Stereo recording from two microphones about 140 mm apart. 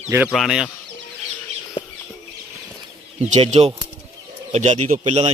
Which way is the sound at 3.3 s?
45° right (ahead or behind).